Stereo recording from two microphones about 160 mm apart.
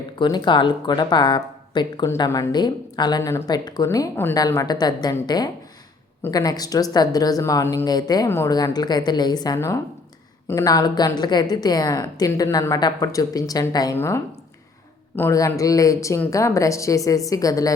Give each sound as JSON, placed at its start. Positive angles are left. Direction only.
{"t": 0.2, "sound": "speech", "side_deg": 30}